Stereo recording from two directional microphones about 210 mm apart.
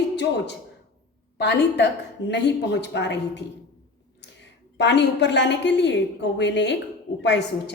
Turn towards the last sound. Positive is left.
turn(degrees=55)  # may be behind; listen again after turning